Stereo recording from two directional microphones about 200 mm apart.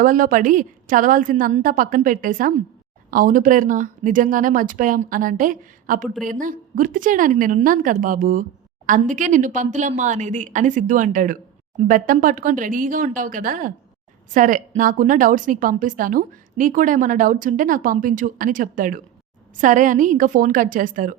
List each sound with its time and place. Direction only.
0.0 s a woman's voice: 45° right (ahead or behind)